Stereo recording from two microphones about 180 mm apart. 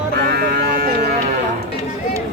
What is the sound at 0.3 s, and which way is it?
Sheep, 60° right (ahead or behind).